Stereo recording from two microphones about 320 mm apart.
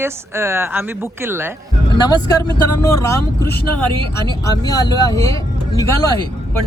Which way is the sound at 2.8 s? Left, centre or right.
Centre.